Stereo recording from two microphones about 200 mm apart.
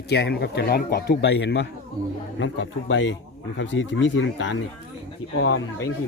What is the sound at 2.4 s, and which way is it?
Speech, 75° left (ahead or behind).